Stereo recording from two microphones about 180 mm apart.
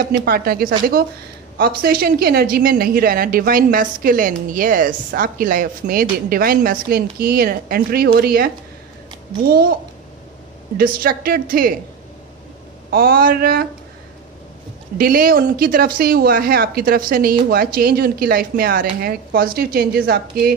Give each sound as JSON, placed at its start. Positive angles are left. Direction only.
{"t": 0.0, "sound": "a woman's voice", "side_deg": -60}
{"t": 10.8, "sound": "speech", "side_deg": -55}
{"t": 12.9, "sound": "speech", "side_deg": -55}
{"t": 15.0, "sound": "speech", "side_deg": -55}